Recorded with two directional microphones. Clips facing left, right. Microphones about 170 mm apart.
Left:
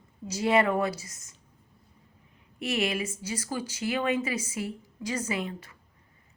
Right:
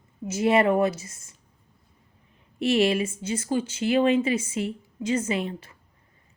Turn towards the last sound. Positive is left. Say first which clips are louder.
# right 4 dB
turn(degrees=-25)  # may be behind; listen again after turning